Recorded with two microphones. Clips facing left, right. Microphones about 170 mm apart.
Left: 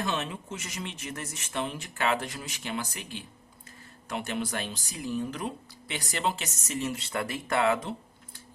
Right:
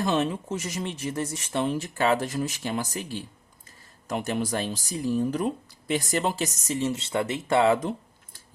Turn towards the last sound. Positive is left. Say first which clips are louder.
# right 5 dB
turn(degrees=-30)  # may be behind; listen again after turning